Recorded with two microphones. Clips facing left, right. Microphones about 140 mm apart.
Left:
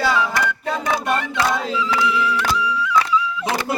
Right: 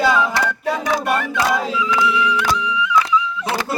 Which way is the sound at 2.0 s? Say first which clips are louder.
Right 2 dB; centre (ahead or behind).